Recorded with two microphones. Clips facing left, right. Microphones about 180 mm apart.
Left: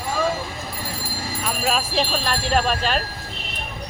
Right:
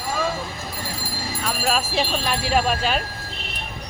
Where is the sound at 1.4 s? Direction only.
Centre (ahead or behind).